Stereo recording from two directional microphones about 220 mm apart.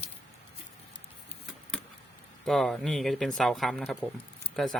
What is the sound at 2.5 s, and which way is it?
Speech, centre (ahead or behind).